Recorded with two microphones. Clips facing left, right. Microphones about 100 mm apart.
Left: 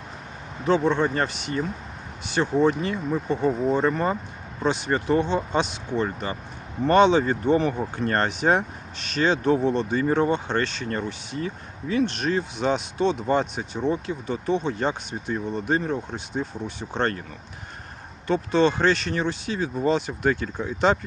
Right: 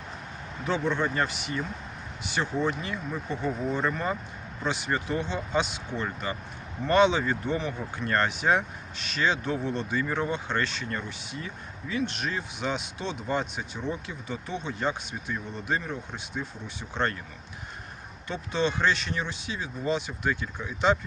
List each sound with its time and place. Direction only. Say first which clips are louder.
0.9 s speech: left 5 dB; 30° left (ahead or behind)
10.8 s speech: left 6 dB; 45° left (ahead or behind)
18.3 s speech: left 8 dB; 40° left (ahead or behind)